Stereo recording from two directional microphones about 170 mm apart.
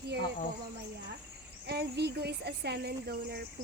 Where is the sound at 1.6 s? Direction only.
75° right (ahead or behind).